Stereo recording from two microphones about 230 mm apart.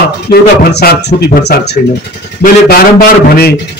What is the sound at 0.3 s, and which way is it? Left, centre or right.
Speech, left.